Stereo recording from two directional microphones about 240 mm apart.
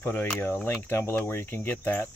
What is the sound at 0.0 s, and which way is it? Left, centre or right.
Speech, centre.